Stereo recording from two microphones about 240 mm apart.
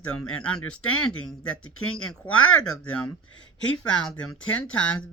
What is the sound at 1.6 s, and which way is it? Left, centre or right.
Speech, left.